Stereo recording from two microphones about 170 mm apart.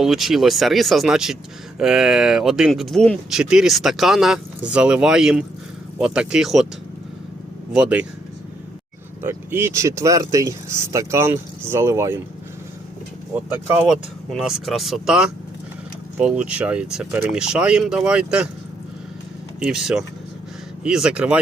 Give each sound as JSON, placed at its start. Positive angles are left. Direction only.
{"t": 0.0, "sound": "speech", "side_deg": 0}
{"t": 7.7, "sound": "speech", "side_deg": -5}
{"t": 9.2, "sound": "speech", "side_deg": -15}
{"t": 13.8, "sound": "speech", "side_deg": 0}
{"t": 19.5, "sound": "speech", "side_deg": -5}